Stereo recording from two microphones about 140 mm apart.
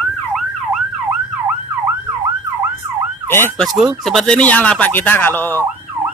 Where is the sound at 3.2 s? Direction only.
15° left (ahead or behind).